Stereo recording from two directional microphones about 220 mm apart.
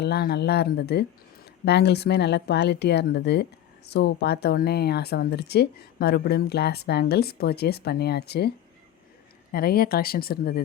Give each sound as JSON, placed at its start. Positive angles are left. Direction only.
{"t": 0.0, "sound": "speech", "side_deg": 45}